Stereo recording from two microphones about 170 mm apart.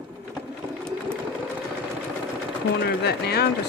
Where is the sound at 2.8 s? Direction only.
75° left (ahead or behind).